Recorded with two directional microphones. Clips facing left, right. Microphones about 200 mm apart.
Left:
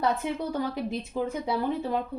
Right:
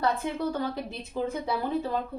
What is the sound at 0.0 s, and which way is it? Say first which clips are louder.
A woman's voice: even; 15° left (ahead or behind).